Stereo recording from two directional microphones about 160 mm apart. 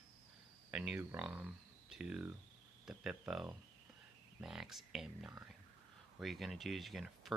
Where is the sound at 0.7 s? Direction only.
10° right (ahead or behind).